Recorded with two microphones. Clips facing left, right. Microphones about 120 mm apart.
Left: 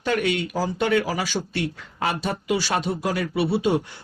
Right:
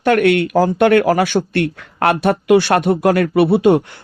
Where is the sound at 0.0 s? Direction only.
65° right (ahead or behind).